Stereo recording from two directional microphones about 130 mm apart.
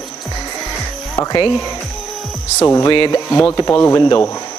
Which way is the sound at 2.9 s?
35° left (ahead or behind).